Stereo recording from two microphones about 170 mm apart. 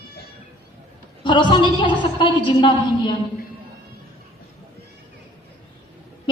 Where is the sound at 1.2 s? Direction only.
25° left (ahead or behind).